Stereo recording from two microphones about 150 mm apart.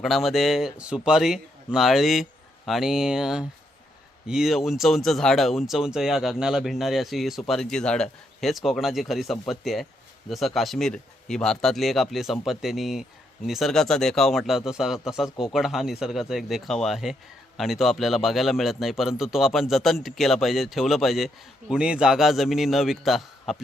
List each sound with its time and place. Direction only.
0.0 s a man's voice: centre (ahead or behind)